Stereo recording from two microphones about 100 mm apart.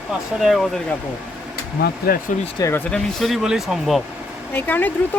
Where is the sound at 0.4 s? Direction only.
Centre (ahead or behind).